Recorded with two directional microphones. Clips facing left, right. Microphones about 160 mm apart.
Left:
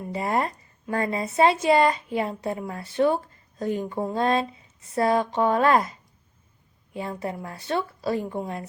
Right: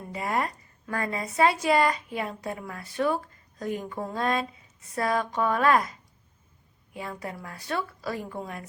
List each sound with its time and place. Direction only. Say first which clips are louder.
0.1 s a woman's voice: left 3 dB; 30° left (ahead or behind)